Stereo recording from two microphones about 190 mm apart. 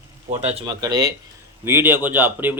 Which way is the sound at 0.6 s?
20° right (ahead or behind).